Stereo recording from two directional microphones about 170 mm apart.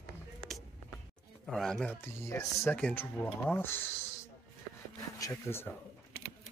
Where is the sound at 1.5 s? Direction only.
5° left (ahead or behind).